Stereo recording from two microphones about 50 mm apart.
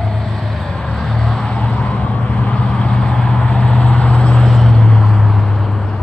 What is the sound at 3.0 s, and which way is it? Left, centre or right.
Vehicle, centre.